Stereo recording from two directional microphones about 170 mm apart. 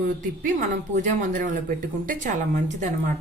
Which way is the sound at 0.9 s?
45° right (ahead or behind).